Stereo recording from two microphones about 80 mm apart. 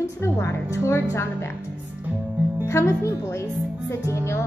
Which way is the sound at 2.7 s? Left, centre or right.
Left.